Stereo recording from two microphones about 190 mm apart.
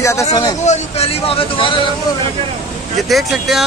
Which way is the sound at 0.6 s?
35° left (ahead or behind).